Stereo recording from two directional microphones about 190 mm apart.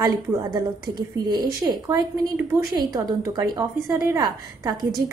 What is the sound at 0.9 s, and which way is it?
A woman's voice, 20° right (ahead or behind).